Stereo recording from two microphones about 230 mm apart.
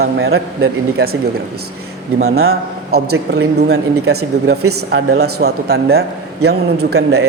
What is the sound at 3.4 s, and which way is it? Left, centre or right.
A man's voice, right.